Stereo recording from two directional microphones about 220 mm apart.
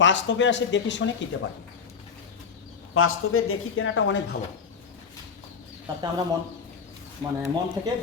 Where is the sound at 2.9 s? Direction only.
70° left (ahead or behind).